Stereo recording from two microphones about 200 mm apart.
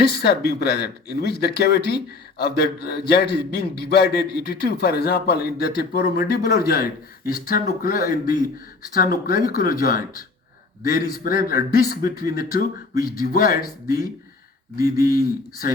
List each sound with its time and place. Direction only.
0.0 s a man's voice: 55° left (ahead or behind)